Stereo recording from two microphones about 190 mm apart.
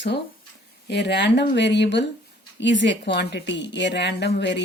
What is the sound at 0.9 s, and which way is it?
A woman's voice, 65° left (ahead or behind).